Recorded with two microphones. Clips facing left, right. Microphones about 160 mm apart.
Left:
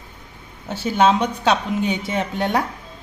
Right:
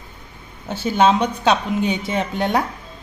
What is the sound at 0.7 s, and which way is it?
Speech, 20° right (ahead or behind).